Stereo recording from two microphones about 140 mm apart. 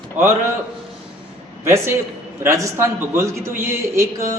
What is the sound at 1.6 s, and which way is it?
A man's voice, 20° right (ahead or behind).